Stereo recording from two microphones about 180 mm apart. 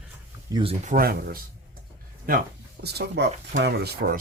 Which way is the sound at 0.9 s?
55° right (ahead or behind).